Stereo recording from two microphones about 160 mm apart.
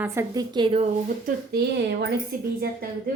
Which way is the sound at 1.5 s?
90° right.